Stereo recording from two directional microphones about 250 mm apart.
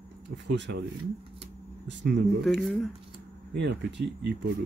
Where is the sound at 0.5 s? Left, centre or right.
Right.